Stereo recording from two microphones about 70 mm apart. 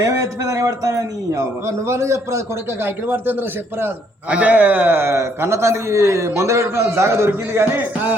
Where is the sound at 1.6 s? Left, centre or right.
Right.